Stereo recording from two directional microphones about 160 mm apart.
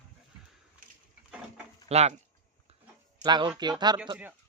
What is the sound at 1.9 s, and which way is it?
Speech, 40° right (ahead or behind).